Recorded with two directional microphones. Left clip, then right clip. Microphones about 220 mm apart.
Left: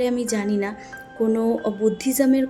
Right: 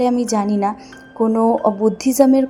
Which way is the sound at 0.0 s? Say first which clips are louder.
Right 5 dB; 20° right (ahead or behind).